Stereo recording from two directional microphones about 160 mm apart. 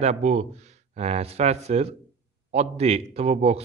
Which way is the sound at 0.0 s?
45° right (ahead or behind).